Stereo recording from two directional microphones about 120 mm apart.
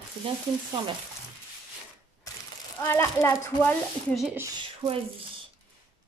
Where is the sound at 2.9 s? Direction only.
20° left (ahead or behind).